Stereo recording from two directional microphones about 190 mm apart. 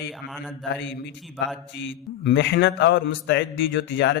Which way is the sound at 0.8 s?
65° left (ahead or behind).